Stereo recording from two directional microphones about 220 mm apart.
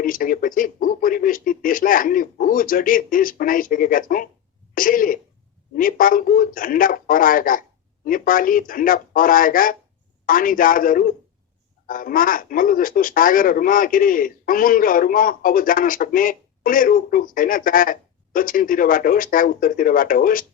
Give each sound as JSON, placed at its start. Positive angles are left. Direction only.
{"t": 0.0, "sound": "speech", "side_deg": 40}
{"t": 4.7, "sound": "throat clearing", "side_deg": 40}
{"t": 5.7, "sound": "speech", "side_deg": 40}